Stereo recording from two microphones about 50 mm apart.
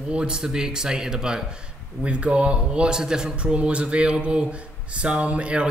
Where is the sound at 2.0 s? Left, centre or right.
Right.